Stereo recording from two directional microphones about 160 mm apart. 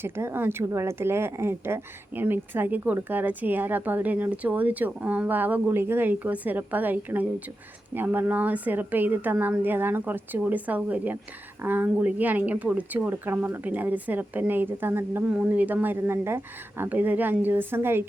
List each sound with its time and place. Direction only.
0.0 s speech: 15° right (ahead or behind)